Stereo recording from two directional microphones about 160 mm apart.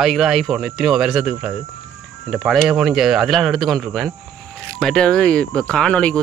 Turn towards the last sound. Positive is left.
turn(degrees=5)  # may be behind; listen again after turning